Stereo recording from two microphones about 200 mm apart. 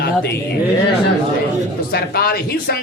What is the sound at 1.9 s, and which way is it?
Speech, 50° left (ahead or behind).